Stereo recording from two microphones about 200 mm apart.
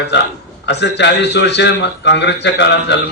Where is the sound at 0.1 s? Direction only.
60° left (ahead or behind).